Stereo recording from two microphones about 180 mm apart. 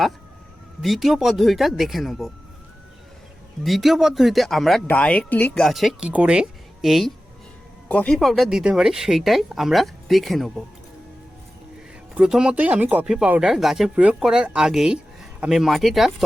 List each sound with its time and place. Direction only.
0.8 s speech: centre (ahead or behind)
3.6 s speech: centre (ahead or behind)
12.1 s speech: 5° right (ahead or behind)